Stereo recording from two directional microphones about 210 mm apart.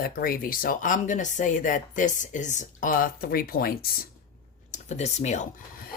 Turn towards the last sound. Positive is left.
turn(degrees=40)  # may be behind; listen again after turning